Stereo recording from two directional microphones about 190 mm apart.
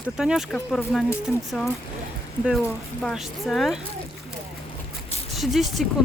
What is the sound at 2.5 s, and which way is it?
Speech, centre (ahead or behind).